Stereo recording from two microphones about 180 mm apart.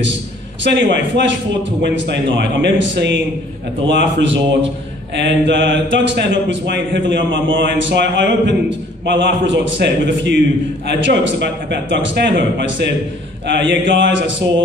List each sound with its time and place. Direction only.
0.7 s a man's voice: 80° right